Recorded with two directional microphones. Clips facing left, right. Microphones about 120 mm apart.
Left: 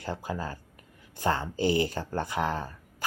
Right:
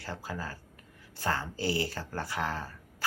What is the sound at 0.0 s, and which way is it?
Speech, 20° left (ahead or behind).